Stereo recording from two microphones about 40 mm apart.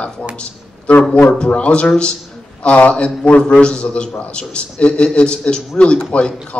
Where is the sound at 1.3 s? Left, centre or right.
Left.